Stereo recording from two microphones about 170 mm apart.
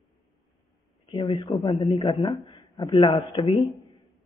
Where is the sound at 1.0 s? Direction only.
30° left (ahead or behind).